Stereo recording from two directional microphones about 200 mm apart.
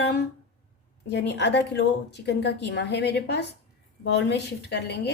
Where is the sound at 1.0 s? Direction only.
60° left (ahead or behind).